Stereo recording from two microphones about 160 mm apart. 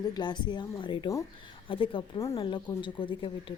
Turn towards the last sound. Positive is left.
turn(degrees=30)  # may be behind; listen again after turning